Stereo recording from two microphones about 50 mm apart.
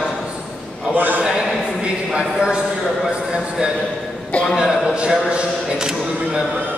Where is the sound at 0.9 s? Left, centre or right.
Right.